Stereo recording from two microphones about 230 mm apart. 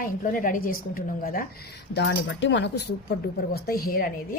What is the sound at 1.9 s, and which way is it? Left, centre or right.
A woman's voice, left.